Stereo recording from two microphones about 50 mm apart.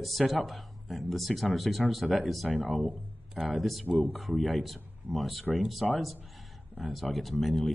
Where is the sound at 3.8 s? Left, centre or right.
Right.